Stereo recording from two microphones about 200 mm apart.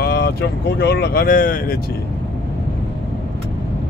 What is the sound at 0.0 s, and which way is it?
Speech, 50° left (ahead or behind).